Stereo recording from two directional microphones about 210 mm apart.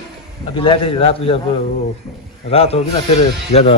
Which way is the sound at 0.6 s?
25° left (ahead or behind).